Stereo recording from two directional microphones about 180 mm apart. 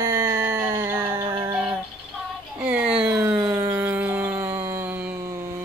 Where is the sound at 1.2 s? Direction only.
15° right (ahead or behind).